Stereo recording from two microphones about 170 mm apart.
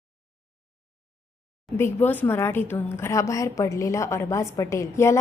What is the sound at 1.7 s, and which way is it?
A woman's voice, 15° left (ahead or behind).